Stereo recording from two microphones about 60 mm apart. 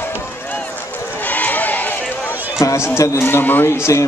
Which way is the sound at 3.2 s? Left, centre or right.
Left.